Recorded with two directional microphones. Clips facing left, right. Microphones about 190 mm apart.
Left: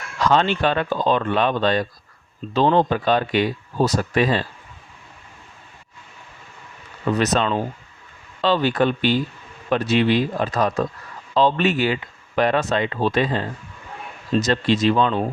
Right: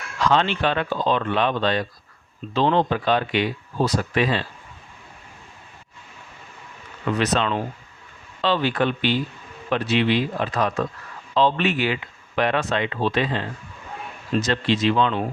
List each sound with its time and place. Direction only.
0.3 s speech: 45° left (ahead or behind)
7.1 s speech: 40° left (ahead or behind)